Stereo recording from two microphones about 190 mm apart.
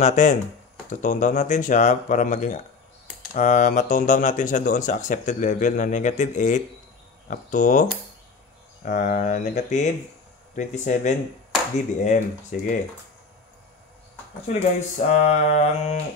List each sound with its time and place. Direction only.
0.0 s speech: 40° left (ahead or behind)
8.8 s speech: 45° left (ahead or behind)
14.5 s speech: 40° left (ahead or behind)